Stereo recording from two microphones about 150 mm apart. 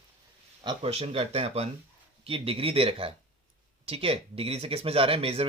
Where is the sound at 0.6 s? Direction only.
40° right (ahead or behind).